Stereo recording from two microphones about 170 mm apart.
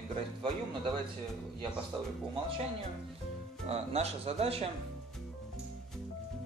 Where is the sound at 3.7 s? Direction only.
35° right (ahead or behind).